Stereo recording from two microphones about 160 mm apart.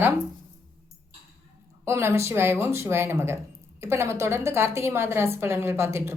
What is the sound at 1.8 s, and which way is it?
A woman's voice, 15° right (ahead or behind).